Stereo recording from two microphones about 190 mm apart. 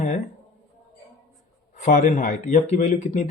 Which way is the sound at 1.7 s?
40° left (ahead or behind).